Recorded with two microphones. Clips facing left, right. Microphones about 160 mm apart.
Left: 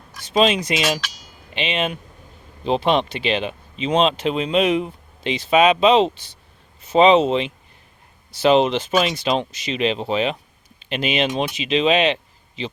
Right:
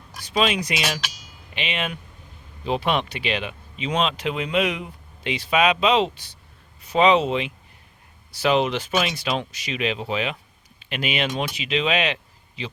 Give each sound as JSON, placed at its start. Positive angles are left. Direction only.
{"t": 0.3, "sound": "speech", "side_deg": 25}
{"t": 8.9, "sound": "speech", "side_deg": 35}
{"t": 9.1, "sound": "speech", "side_deg": 25}